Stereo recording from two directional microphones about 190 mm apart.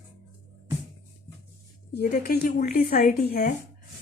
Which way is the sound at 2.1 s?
55° left (ahead or behind).